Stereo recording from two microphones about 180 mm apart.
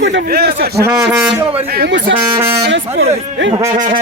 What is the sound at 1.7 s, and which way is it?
Speech, 70° right (ahead or behind).